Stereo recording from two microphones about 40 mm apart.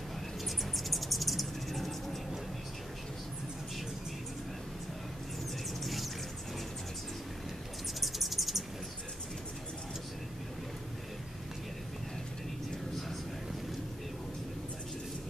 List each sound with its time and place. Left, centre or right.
0.7 s bird: centre
5.8 s a sound: centre
8.0 s bird: centre